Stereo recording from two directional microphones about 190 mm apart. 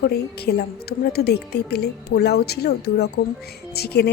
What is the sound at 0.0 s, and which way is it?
A woman's voice, 55° left (ahead or behind).